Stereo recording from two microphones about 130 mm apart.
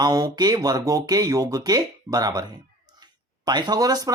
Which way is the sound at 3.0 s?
30° right (ahead or behind).